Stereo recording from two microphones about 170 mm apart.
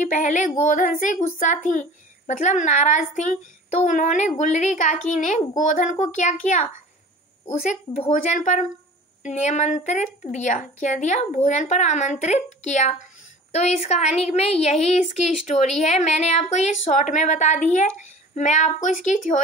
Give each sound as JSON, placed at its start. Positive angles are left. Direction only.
{"t": 0.0, "sound": "a woman's voice", "side_deg": 45}
{"t": 8.1, "sound": "a woman's voice", "side_deg": 50}